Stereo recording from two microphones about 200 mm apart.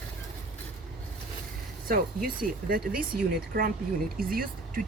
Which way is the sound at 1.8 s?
45° right (ahead or behind).